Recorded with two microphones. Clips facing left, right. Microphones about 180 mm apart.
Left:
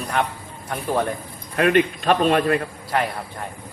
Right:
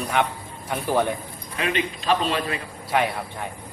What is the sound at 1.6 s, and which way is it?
A man's voice, 55° left (ahead or behind).